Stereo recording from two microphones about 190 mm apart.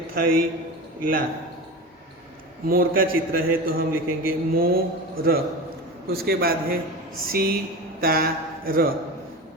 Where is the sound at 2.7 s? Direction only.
50° right (ahead or behind).